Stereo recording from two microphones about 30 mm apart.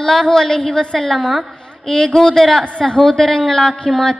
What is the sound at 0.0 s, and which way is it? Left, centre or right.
A woman's voice, centre.